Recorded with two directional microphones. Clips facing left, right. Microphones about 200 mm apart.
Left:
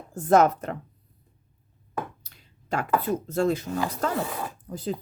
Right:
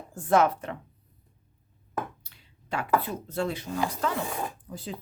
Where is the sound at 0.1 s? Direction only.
40° left (ahead or behind).